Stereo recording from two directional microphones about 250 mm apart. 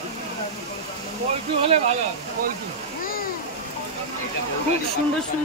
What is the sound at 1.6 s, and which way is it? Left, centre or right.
Speech, right.